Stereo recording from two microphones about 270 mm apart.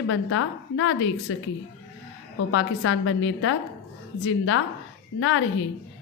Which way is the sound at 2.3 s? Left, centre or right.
Left.